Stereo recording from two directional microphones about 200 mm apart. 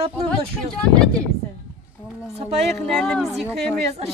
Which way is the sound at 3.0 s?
Centre (ahead or behind).